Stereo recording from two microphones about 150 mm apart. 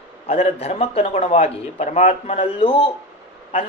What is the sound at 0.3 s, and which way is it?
Speech, 45° left (ahead or behind).